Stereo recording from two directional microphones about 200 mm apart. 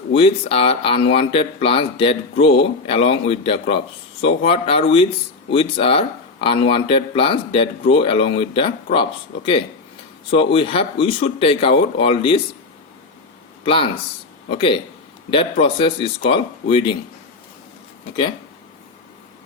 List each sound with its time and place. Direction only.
0.2 s speech: 30° left (ahead or behind)
13.7 s speech: 25° left (ahead or behind)